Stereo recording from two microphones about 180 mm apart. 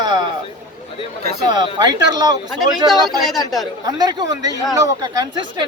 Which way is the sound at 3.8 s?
20° right (ahead or behind).